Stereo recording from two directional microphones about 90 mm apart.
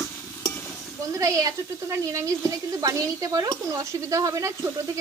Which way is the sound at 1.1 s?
40° right (ahead or behind).